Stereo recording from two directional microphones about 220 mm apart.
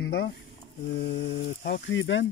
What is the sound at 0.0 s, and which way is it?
Speech, 55° left (ahead or behind).